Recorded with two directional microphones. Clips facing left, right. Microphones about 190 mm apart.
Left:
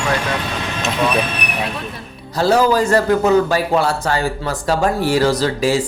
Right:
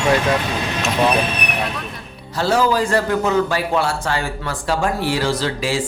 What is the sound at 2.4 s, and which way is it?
A man's voice, 40° left (ahead or behind).